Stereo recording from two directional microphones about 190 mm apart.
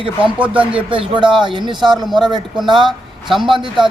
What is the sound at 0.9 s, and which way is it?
A man's voice, 25° right (ahead or behind).